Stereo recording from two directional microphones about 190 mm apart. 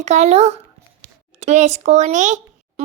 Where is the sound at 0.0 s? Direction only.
35° right (ahead or behind).